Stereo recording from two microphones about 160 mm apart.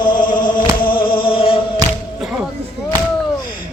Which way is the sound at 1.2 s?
35° left (ahead or behind).